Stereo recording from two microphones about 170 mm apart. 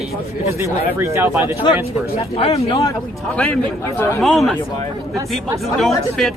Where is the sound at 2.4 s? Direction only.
35° left (ahead or behind).